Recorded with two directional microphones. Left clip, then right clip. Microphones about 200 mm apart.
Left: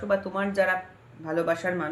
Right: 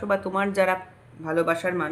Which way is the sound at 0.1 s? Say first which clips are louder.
Right 2 dB; 30° right (ahead or behind).